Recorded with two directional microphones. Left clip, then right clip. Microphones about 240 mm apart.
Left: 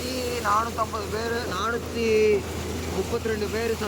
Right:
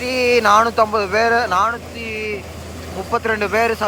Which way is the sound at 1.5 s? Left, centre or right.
Centre.